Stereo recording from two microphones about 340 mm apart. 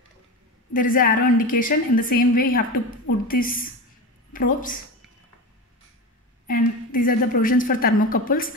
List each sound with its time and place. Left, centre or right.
0.7 s a woman's voice: left
6.4 s a woman's voice: left